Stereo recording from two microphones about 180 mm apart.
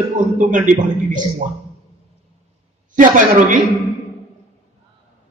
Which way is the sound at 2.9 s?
45° right (ahead or behind).